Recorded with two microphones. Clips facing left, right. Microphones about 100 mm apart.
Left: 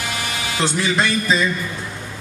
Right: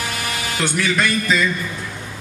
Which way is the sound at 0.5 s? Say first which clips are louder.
Left 1 dB; 30° left (ahead or behind).